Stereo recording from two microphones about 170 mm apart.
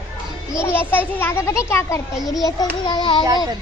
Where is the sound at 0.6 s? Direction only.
10° left (ahead or behind).